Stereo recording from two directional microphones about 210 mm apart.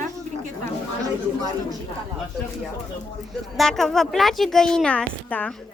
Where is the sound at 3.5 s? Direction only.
Centre (ahead or behind).